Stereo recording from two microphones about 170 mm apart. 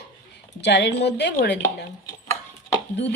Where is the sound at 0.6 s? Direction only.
90° left.